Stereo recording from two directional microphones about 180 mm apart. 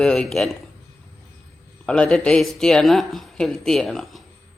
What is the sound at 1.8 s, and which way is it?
Speech, 5° left (ahead or behind).